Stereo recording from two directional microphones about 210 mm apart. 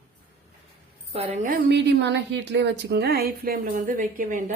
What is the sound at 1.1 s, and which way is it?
Speech, 30° right (ahead or behind).